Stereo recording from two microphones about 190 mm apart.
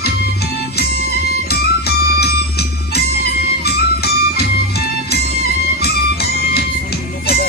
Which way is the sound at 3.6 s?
55° left (ahead or behind).